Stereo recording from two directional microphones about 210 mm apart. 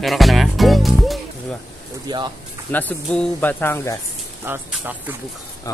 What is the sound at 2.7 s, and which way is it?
Speech, 10° left (ahead or behind).